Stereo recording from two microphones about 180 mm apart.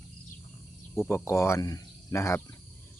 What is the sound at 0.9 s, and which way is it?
Speech, 15° left (ahead or behind).